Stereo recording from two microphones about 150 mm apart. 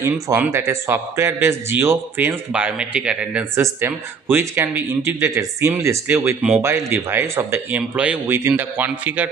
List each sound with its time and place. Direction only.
0.0 s a man's voice: 15° right (ahead or behind)